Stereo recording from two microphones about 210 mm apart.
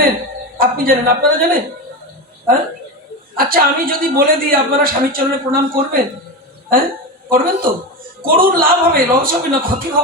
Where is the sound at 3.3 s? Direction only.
45° right (ahead or behind).